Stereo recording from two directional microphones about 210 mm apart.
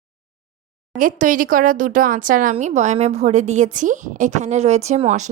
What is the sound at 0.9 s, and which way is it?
A woman's voice, 40° right (ahead or behind).